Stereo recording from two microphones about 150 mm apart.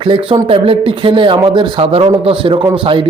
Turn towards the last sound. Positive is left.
turn(degrees=-35)  # may be behind; listen again after turning